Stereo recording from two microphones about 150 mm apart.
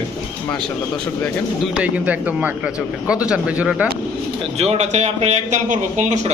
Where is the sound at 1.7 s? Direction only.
10° right (ahead or behind).